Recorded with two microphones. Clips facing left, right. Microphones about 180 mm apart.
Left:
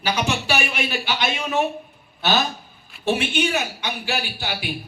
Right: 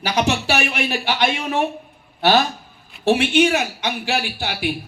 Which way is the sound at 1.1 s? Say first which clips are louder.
Right 4 dB; 60° right (ahead or behind).